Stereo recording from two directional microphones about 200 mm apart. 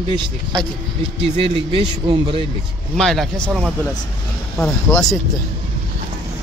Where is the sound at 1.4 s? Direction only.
25° right (ahead or behind).